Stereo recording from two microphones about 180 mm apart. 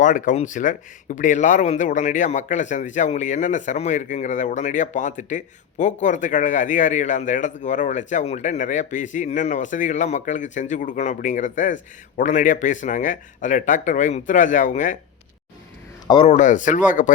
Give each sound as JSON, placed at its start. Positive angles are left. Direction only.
{"t": 0.0, "sound": "speech", "side_deg": 45}
{"t": 16.0, "sound": "a man's voice", "side_deg": 30}
{"t": 16.3, "sound": "speech", "side_deg": 45}